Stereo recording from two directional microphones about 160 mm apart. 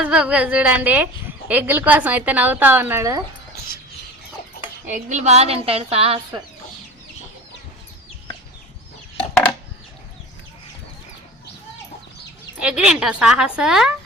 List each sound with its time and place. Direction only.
0.0 s a woman's voice: 5° right (ahead or behind)
4.9 s a woman's voice: 50° right (ahead or behind)
12.5 s a woman's voice: 5° right (ahead or behind)